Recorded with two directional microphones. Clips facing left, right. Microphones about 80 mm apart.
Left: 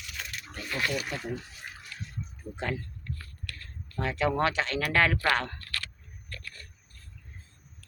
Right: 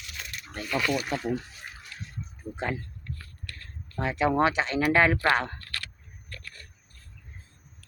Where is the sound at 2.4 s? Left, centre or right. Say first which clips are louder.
Right 2 dB; centre.